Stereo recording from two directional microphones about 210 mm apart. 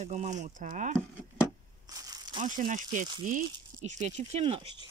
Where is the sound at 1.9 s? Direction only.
20° right (ahead or behind).